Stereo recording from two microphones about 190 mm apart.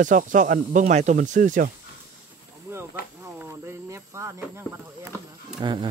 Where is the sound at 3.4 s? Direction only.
15° right (ahead or behind).